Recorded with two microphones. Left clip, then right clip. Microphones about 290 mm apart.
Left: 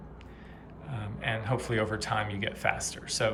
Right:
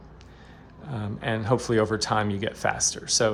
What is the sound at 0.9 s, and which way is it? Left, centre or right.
Speech, centre.